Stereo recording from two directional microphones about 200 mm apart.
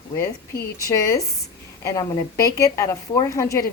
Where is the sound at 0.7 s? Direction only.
15° left (ahead or behind).